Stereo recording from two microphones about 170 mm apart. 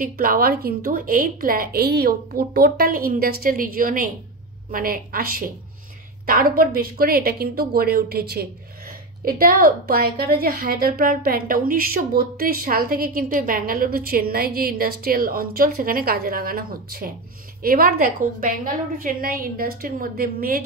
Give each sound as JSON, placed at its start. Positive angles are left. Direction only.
{"t": 0.0, "sound": "a woman's voice", "side_deg": -55}